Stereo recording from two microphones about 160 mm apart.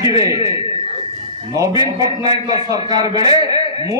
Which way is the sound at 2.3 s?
25° right (ahead or behind).